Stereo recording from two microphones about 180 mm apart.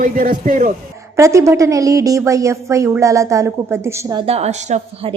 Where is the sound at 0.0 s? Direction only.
50° right (ahead or behind).